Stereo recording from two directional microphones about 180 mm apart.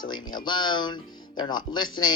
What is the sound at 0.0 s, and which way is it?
Speech, 25° left (ahead or behind).